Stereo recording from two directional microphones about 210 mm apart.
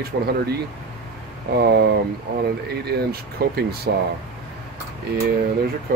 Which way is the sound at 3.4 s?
45° right (ahead or behind).